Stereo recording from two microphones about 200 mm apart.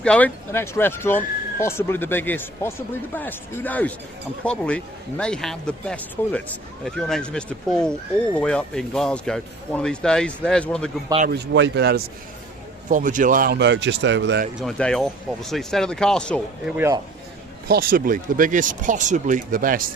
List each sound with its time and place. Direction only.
0.0 s speech: 5° left (ahead or behind)
11.3 s speech: 60° right (ahead or behind)
12.9 s speech: 40° right (ahead or behind); by 14.4 s 65° right (ahead or behind)
14.6 s speech: 5° left (ahead or behind)
16.7 s speech: 10° right (ahead or behind)
17.7 s speech: 45° right (ahead or behind)